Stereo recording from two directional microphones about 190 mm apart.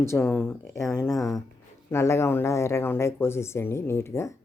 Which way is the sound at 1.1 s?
Centre (ahead or behind).